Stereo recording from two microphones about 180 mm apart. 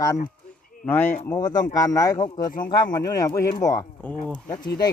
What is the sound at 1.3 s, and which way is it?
Speech, 20° left (ahead or behind).